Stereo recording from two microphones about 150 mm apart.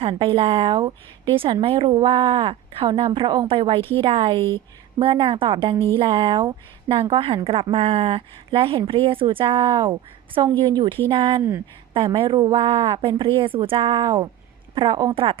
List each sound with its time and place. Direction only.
0.0 s a woman's voice: 35° right (ahead or behind)
11.3 s speech: 15° right (ahead or behind)
11.9 s a woman's voice: 35° right (ahead or behind)